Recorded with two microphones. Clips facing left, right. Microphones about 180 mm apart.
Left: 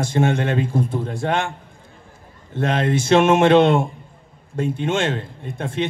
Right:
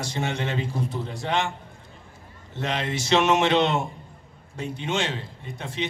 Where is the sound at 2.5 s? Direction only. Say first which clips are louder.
Left 8 dB; 50° left (ahead or behind).